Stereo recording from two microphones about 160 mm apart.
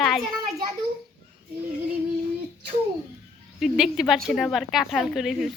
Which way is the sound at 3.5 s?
Centre (ahead or behind).